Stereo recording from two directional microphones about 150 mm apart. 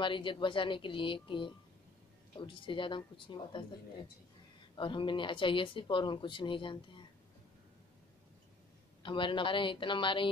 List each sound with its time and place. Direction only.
0.0 s speech: 35° left (ahead or behind)
4.7 s speech: 35° left (ahead or behind)
9.0 s speech: 35° left (ahead or behind)